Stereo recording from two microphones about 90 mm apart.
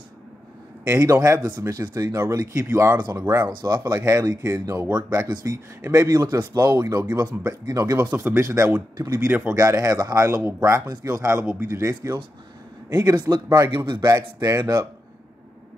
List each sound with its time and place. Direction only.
0.8 s speech: 30° right (ahead or behind)
8.0 s a man's voice: 20° right (ahead or behind)
9.6 s speech: 40° right (ahead or behind)
12.9 s speech: 50° right (ahead or behind)